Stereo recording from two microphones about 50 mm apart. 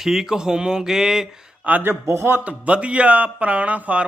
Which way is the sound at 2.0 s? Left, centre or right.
Right.